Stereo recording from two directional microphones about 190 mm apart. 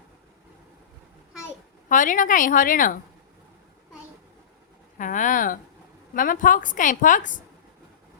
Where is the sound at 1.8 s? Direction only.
45° left (ahead or behind).